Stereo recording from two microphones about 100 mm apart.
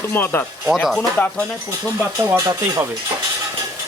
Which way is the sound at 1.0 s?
15° left (ahead or behind).